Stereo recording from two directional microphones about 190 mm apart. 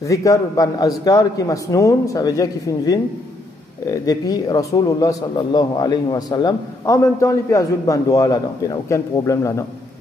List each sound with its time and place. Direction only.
0.0 s a man's voice: 15° left (ahead or behind)